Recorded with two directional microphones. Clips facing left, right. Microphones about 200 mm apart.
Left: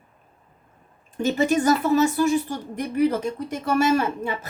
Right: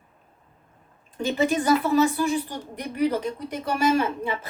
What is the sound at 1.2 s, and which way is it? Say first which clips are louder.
A woman's voice: left 3 dB; 45° left (ahead or behind).